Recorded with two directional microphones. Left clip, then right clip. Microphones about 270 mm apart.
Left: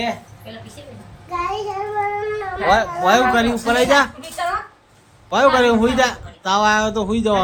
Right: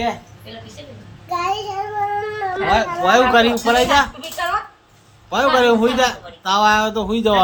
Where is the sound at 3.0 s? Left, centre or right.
Centre.